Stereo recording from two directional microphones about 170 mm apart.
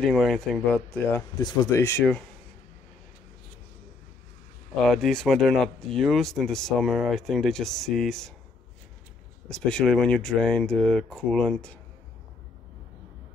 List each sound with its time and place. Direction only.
0.0 s speech: centre (ahead or behind)
1.3 s speech: 25° left (ahead or behind)
4.8 s speech: centre (ahead or behind)
9.5 s speech: 5° left (ahead or behind)